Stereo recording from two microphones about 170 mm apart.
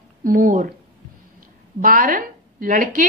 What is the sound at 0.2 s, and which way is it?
Speech, 50° right (ahead or behind).